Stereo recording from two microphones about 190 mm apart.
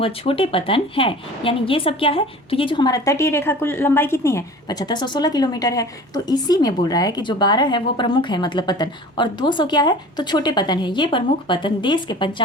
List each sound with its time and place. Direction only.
0.0 s a woman's voice: 30° left (ahead or behind)